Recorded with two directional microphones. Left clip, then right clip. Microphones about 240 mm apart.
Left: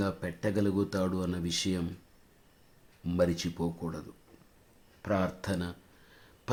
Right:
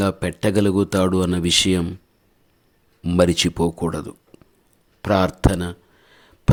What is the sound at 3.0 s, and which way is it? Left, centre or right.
Speech, right.